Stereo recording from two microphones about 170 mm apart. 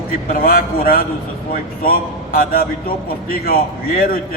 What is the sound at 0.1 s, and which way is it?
A man's voice, 60° left (ahead or behind).